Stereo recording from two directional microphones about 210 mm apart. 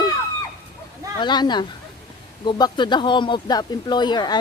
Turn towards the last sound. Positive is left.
turn(degrees=20)  # may be behind; listen again after turning